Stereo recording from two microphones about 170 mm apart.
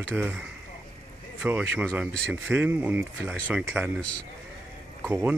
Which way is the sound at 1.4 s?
10° right (ahead or behind).